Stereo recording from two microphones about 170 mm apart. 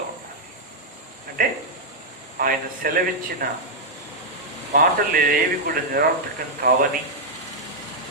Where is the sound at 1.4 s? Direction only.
55° right (ahead or behind).